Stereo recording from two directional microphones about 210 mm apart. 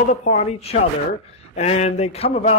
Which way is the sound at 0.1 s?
35° left (ahead or behind).